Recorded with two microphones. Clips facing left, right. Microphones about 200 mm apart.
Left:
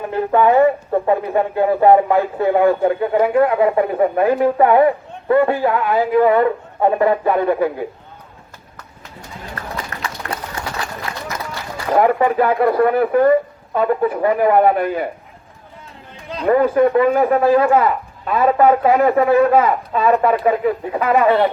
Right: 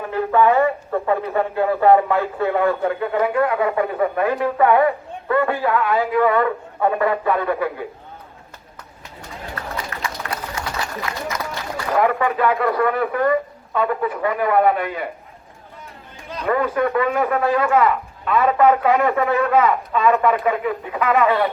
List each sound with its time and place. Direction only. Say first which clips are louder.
0.1 s speech: left 2 dB; 30° left (ahead or behind)
11.1 s run: even; 30° left (ahead or behind)
11.9 s speech: left 4 dB; 35° left (ahead or behind)
16.3 s speech: left 6 dB; 30° left (ahead or behind)